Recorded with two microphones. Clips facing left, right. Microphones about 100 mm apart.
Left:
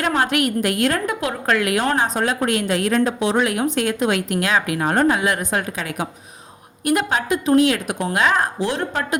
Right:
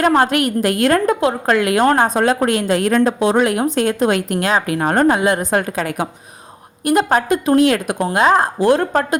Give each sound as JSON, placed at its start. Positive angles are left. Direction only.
{"t": 0.0, "sound": "a woman's voice", "side_deg": -40}
{"t": 1.2, "sound": "a woman's voice", "side_deg": -30}
{"t": 1.8, "sound": "a woman's voice", "side_deg": -50}
{"t": 2.3, "sound": "a woman's voice", "side_deg": -35}
{"t": 5.5, "sound": "a woman's voice", "side_deg": -45}
{"t": 7.1, "sound": "a woman's voice", "side_deg": -50}
{"t": 8.0, "sound": "a woman's voice", "side_deg": -30}
{"t": 8.5, "sound": "a woman's voice", "side_deg": -50}